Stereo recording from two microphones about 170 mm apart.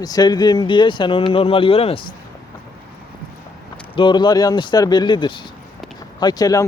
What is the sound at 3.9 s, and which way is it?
Speech, 25° left (ahead or behind).